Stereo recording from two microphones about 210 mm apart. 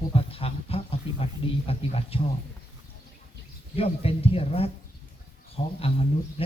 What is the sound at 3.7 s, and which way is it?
Speech, 30° left (ahead or behind).